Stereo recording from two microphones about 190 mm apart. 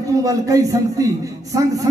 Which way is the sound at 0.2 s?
15° right (ahead or behind).